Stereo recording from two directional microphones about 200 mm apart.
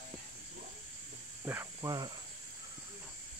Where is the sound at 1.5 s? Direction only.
15° right (ahead or behind).